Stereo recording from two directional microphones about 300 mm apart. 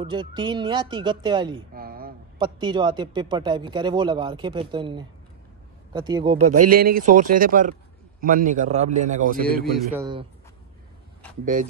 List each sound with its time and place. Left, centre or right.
0.0 s speech: centre
1.7 s a sound: right
2.3 s speech: centre
6.4 s a man's voice: right
6.7 s a man's voice: right